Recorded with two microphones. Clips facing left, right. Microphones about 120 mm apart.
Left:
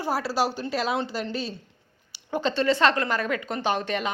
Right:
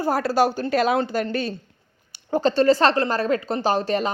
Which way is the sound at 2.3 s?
40° right (ahead or behind).